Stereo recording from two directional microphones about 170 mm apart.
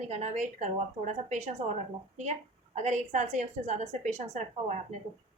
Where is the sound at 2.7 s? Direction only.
45° right (ahead or behind).